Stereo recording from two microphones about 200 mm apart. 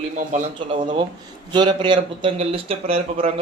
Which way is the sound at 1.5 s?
25° right (ahead or behind).